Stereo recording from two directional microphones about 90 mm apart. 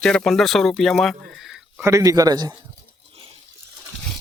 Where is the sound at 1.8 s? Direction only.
40° right (ahead or behind).